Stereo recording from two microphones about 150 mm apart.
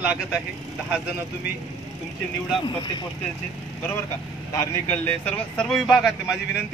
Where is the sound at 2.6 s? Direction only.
30° left (ahead or behind).